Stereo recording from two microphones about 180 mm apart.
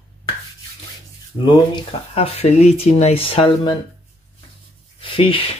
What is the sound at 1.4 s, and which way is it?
Speech, 30° left (ahead or behind).